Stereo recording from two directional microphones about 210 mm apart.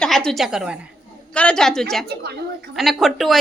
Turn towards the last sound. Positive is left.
turn(degrees=0)  # may be behind; listen again after turning